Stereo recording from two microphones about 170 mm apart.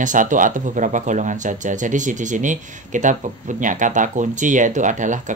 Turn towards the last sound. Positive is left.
turn(degrees=-45)  # may be behind; listen again after turning